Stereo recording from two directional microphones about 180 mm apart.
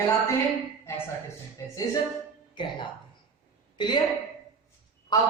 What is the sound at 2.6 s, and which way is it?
Speech, 25° left (ahead or behind).